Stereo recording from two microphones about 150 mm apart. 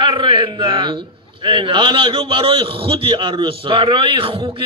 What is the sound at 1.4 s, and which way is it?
Speech, 35° right (ahead or behind).